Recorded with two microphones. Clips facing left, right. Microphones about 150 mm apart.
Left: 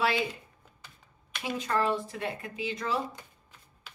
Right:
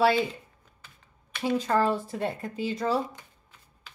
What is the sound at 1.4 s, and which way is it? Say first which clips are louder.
Speech: right 5 dB; 35° right (ahead or behind).